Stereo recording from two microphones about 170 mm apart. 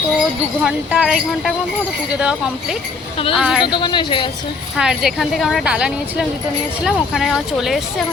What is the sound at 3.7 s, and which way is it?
Speech, 25° left (ahead or behind).